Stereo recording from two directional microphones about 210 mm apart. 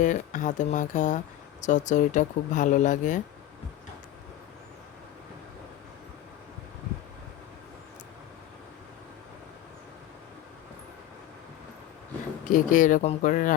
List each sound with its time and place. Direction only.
0.0 s speech: 35° left (ahead or behind)
12.5 s speech: 40° left (ahead or behind)